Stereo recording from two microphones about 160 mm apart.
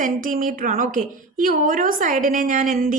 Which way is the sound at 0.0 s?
55° right (ahead or behind).